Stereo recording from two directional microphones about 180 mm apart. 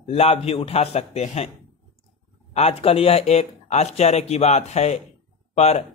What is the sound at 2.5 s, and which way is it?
A man's voice, 35° left (ahead or behind).